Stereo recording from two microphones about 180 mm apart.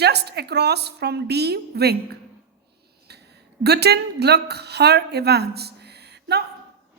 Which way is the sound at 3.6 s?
65° right (ahead or behind).